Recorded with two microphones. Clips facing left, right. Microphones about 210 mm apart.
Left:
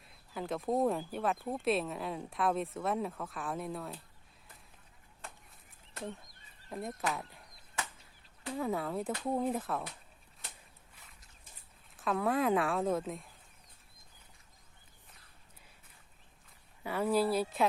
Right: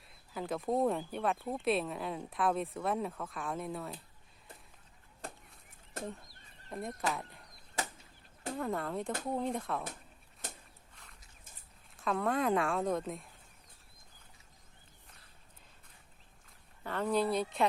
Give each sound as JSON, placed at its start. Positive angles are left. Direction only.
{"t": 0.0, "sound": "speech", "side_deg": 0}
{"t": 5.2, "sound": "fowl", "side_deg": -40}
{"t": 6.7, "sound": "speech", "side_deg": 0}
{"t": 8.5, "sound": "speech", "side_deg": 0}
{"t": 10.9, "sound": "a sound", "side_deg": 5}
{"t": 11.9, "sound": "speech", "side_deg": 0}
{"t": 16.8, "sound": "speech", "side_deg": 10}